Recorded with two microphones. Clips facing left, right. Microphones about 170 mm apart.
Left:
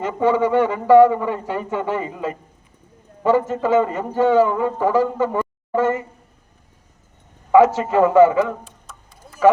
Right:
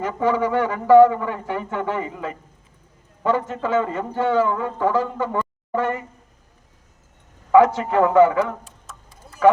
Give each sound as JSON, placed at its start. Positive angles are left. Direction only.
{"t": 0.0, "sound": "speech", "side_deg": 20}
{"t": 3.5, "sound": "a man's voice", "side_deg": 15}
{"t": 7.5, "sound": "speech", "side_deg": 15}